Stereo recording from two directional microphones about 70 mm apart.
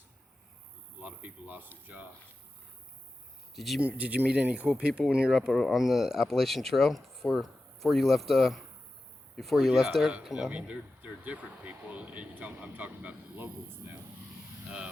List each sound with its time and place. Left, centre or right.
1.0 s speech: right
3.5 s speech: centre
3.8 s speech: centre
5.5 s speech: centre; by 13.9 s right